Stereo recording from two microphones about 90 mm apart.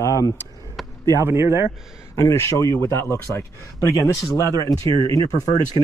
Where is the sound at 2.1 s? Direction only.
35° left (ahead or behind).